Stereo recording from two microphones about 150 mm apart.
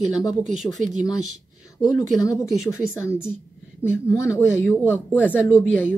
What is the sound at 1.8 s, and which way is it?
A woman's voice, 25° left (ahead or behind).